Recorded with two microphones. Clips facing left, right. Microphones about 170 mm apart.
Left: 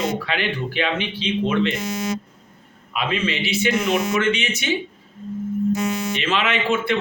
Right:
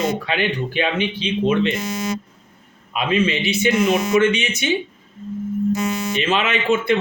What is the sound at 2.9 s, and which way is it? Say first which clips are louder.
A man's voice: right 4 dB; 15° right (ahead or behind).